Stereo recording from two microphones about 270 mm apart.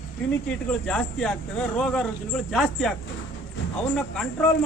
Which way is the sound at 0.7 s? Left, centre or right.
Centre.